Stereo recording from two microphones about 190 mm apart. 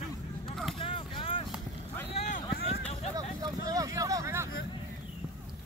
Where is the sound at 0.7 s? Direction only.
30° left (ahead or behind).